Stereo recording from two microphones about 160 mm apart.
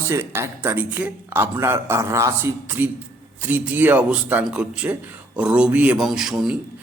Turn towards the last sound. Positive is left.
turn(degrees=-5)  # may be behind; listen again after turning